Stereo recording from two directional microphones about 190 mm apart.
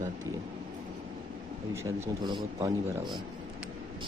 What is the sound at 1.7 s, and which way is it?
Speech, 15° right (ahead or behind).